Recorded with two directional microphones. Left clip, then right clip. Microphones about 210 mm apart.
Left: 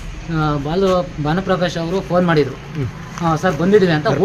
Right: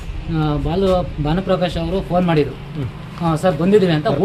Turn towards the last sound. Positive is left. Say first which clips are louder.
# left 1 dB
turn(degrees=5)  # may be behind; listen again after turning